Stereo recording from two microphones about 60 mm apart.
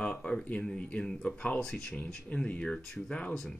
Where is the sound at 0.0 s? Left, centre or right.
Centre.